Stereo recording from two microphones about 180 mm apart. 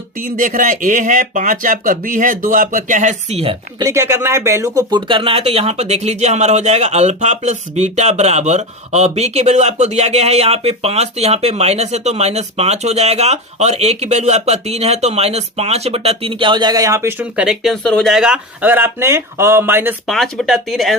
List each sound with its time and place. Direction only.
0.2 s speech: 50° right (ahead or behind)
3.8 s speech: 15° right (ahead or behind)
20.1 s speech: centre (ahead or behind)